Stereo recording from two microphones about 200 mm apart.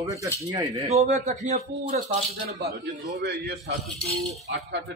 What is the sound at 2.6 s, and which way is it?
A man's voice, 50° right (ahead or behind).